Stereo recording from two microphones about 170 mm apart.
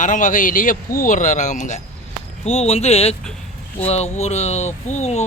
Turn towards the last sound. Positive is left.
turn(degrees=40)  # may be behind; listen again after turning